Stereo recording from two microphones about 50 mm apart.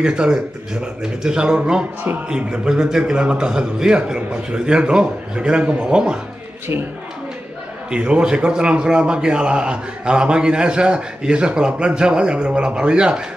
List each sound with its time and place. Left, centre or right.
0.0 s a man's voice: centre
7.9 s a man's voice: right